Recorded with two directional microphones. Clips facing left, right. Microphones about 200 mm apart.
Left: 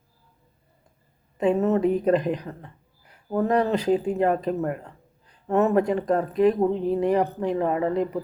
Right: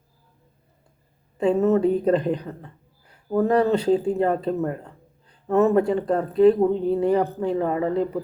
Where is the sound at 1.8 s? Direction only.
30° right (ahead or behind).